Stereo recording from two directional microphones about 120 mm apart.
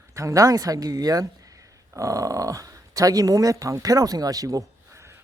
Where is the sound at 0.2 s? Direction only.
25° right (ahead or behind).